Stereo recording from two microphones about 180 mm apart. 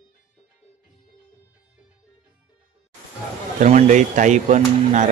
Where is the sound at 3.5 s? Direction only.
45° right (ahead or behind).